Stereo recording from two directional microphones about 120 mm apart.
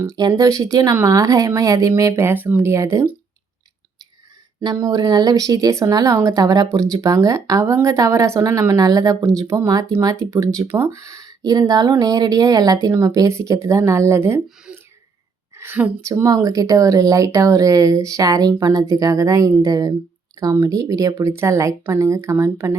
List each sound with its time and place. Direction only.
0.0 s speech: 35° right (ahead or behind)
4.6 s speech: 30° right (ahead or behind)
14.7 s a sound: 10° right (ahead or behind)
15.5 s speech: 20° right (ahead or behind)